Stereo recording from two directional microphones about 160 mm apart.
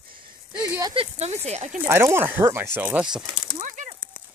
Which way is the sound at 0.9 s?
40° right (ahead or behind).